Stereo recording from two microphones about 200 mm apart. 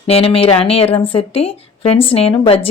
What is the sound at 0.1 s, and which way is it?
Speech, 30° left (ahead or behind).